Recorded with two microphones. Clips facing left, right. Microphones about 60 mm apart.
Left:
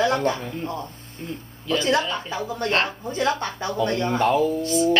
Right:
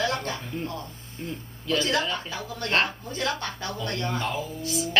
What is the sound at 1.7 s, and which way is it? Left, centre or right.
A woman's voice, left.